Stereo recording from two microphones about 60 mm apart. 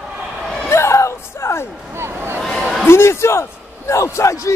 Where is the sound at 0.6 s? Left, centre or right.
Left.